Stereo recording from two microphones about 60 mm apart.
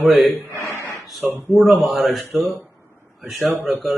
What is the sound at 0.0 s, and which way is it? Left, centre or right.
Speech, centre.